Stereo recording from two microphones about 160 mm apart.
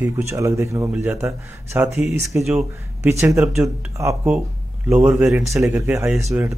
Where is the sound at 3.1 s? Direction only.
15° right (ahead or behind).